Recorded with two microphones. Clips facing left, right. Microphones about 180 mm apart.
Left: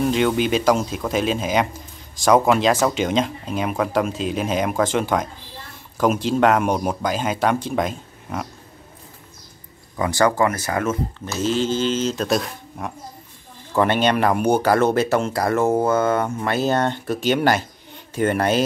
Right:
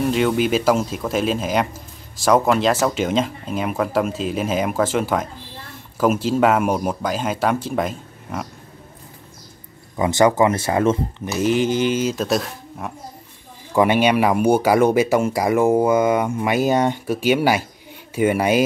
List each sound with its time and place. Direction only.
0.0 s speech: centre (ahead or behind)
9.9 s speech: 20° right (ahead or behind)
11.1 s speech: 15° right (ahead or behind)